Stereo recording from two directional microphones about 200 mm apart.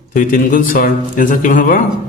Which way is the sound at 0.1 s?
45° left (ahead or behind).